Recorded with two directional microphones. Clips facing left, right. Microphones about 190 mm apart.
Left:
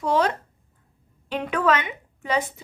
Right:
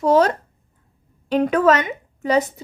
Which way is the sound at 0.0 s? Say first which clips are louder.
Right 6 dB; 40° right (ahead or behind).